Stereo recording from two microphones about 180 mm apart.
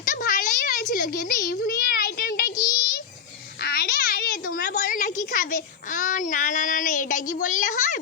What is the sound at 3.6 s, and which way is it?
A child's voice, 55° left (ahead or behind).